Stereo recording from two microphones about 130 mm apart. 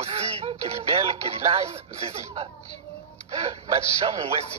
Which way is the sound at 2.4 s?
50° right (ahead or behind).